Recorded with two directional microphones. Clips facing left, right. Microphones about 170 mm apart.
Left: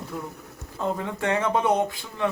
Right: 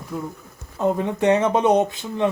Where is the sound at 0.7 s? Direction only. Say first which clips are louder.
Right 7 dB; 20° right (ahead or behind).